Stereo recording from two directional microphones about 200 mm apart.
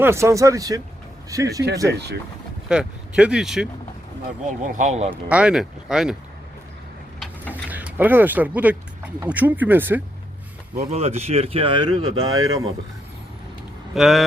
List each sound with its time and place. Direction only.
0.0 s speech: 15° right (ahead or behind)
2.6 s speech: 5° right (ahead or behind)
4.6 s speech: 40° right (ahead or behind)
5.1 s speech: 5° right (ahead or behind)
7.5 s speech: 10° right (ahead or behind)
10.9 s speech: 30° right (ahead or behind)
12.0 s speech: 90° right
13.9 s speech: centre (ahead or behind)